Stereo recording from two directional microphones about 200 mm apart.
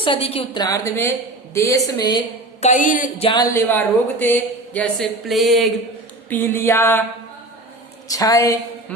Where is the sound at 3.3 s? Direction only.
20° left (ahead or behind).